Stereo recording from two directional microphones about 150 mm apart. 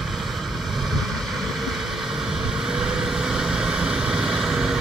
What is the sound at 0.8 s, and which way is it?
Vehicle, centre (ahead or behind).